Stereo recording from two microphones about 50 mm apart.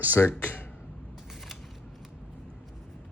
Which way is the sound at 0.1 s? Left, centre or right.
Left.